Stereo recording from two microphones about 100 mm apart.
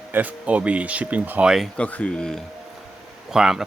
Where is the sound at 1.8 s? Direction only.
15° left (ahead or behind).